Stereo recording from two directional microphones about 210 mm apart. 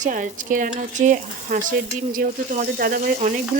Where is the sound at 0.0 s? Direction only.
35° right (ahead or behind).